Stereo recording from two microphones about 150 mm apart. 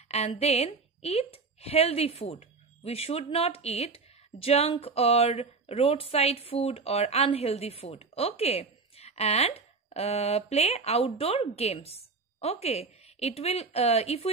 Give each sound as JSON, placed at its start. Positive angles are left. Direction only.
{"t": 0.3, "sound": "a woman's voice", "side_deg": 40}